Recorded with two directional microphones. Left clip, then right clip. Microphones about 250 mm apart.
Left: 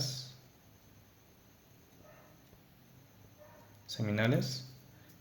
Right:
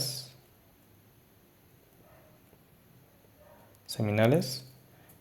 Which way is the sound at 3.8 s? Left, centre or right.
Right.